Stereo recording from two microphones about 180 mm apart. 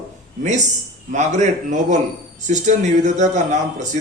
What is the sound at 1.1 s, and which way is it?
A man's voice, 40° right (ahead or behind).